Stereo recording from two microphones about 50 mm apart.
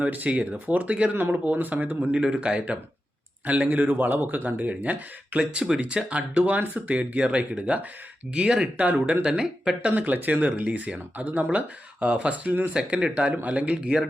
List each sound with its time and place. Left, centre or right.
0.0 s speech: right
1.3 s speech: right
4.4 s speech: right
5.6 s speech: centre
6.1 s speech: right
9.9 s speech: right
12.7 s speech: centre
13.7 s speech: centre